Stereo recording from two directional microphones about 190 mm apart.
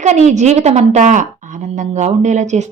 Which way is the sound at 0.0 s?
40° right (ahead or behind).